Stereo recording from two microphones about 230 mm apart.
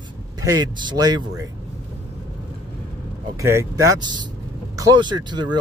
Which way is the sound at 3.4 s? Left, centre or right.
Centre.